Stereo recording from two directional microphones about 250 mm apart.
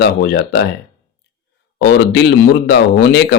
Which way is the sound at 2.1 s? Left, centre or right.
Left.